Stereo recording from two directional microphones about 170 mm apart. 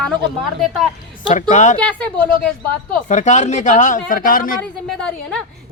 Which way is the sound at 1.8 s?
5° left (ahead or behind).